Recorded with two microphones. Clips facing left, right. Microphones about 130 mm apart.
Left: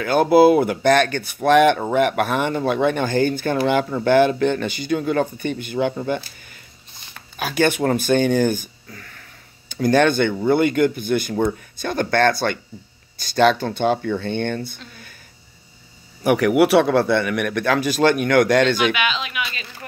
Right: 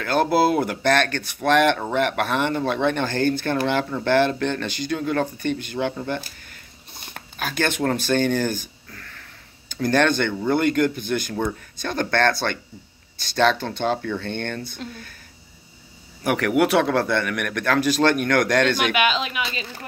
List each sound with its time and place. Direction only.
0.0 s speech: 10° left (ahead or behind)
7.3 s speech: 10° left (ahead or behind)
14.8 s speech: 45° right (ahead or behind)
16.3 s speech: 10° left (ahead or behind)
18.9 s speech: 40° right (ahead or behind)